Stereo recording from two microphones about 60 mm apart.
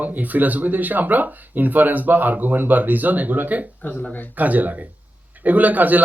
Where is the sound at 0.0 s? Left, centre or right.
Right.